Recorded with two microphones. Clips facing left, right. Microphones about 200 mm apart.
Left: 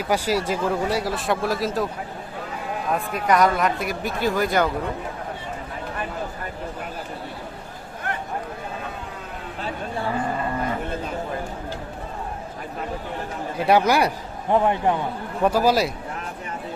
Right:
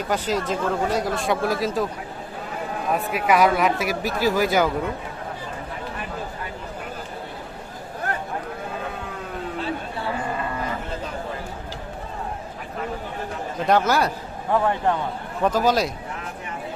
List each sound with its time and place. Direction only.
0.1 s speech: 10° left (ahead or behind)
2.9 s speech: 5° right (ahead or behind)
13.6 s speech: 10° left (ahead or behind)